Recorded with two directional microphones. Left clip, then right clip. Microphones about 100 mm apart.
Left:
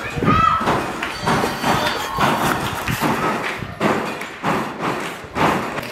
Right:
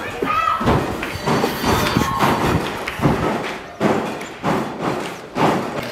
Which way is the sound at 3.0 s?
45° left (ahead or behind).